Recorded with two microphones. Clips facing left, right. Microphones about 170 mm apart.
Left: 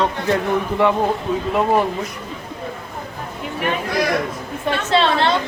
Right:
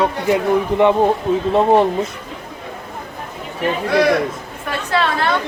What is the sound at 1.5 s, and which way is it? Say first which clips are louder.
Speech: right 4 dB; 30° right (ahead or behind).